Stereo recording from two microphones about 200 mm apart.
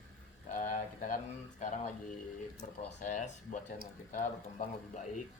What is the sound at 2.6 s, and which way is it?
Speech, 45° left (ahead or behind).